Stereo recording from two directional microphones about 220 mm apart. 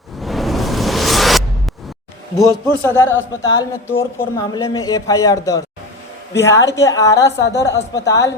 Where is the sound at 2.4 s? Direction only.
10° left (ahead or behind).